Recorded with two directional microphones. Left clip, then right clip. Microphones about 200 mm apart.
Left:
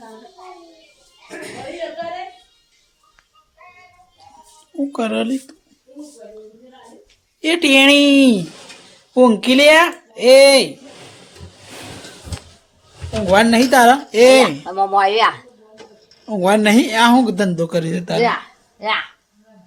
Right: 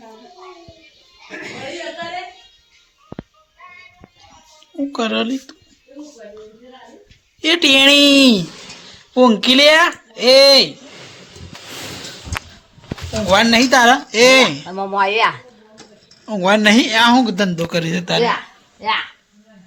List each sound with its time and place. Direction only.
4.8 s speech: 10° left (ahead or behind)
7.4 s speech: 5° left (ahead or behind)
13.3 s speech: 20° left (ahead or behind)
14.6 s speech: 55° left (ahead or behind)
16.2 s speech: 10° left (ahead or behind)